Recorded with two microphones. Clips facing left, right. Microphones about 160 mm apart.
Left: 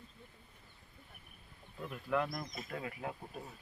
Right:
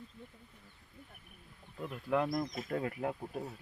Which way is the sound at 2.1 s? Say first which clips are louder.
Right 4 dB; 25° right (ahead or behind).